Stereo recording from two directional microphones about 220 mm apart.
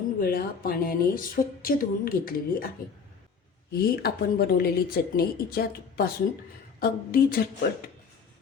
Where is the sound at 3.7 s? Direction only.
45° left (ahead or behind).